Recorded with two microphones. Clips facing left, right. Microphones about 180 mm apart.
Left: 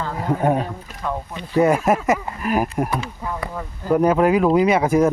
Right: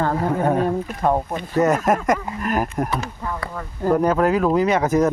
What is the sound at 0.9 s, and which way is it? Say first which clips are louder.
Speech: right 7 dB; 50° right (ahead or behind).